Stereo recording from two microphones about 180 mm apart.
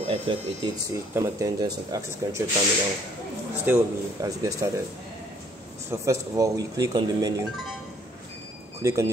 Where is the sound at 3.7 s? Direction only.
15° right (ahead or behind).